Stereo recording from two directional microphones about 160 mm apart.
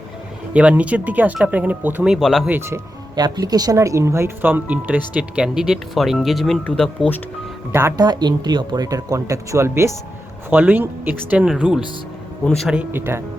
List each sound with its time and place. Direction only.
0.5 s speech: 10° right (ahead or behind)
2.1 s speech: centre (ahead or behind)
2.5 s speech: 15° right (ahead or behind); by 7.2 s 5° left (ahead or behind)
7.7 s speech: 15° right (ahead or behind)